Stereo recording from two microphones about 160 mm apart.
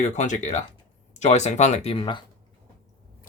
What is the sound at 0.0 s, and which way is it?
Speech, 50° left (ahead or behind).